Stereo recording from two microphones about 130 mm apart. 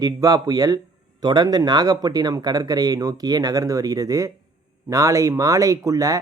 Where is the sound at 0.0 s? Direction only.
25° right (ahead or behind).